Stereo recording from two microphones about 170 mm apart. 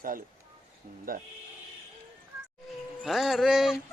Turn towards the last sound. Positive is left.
turn(degrees=-5)  # may be behind; listen again after turning